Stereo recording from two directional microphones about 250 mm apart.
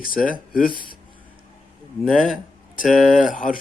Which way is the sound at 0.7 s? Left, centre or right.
Centre.